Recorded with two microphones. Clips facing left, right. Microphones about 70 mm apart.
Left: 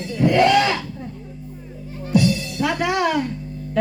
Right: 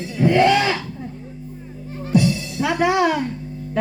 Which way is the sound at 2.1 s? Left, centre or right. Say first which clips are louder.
Even; right.